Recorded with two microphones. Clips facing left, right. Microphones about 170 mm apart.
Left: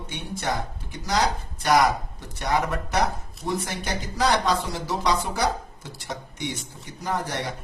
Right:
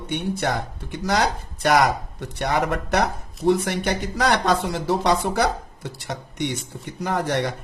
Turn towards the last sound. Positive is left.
turn(degrees=-65)  # may be behind; listen again after turning